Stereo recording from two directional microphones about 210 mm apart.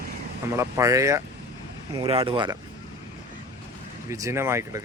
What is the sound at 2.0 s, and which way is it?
Speech, 25° right (ahead or behind).